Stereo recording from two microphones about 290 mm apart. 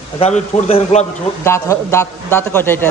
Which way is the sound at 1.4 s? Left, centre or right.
Centre.